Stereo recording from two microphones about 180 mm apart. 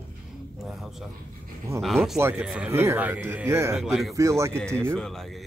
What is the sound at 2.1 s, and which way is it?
Speech, 15° right (ahead or behind).